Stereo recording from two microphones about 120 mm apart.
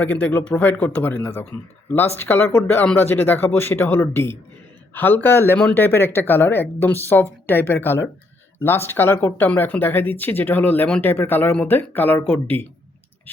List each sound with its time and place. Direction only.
0.0 s speech: 10° left (ahead or behind)